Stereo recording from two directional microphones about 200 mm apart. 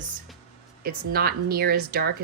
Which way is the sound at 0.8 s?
50° right (ahead or behind).